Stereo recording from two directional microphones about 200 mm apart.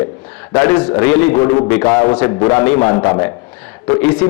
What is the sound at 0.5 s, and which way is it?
A man's voice, 10° left (ahead or behind).